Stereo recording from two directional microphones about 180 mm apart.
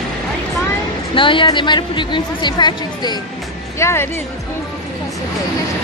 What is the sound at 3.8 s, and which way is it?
Speech, 15° left (ahead or behind).